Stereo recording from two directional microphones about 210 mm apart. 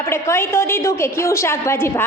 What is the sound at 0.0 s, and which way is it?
A woman's voice, 10° left (ahead or behind).